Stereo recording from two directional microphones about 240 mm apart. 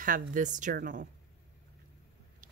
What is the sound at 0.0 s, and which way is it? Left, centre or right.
Speech, right.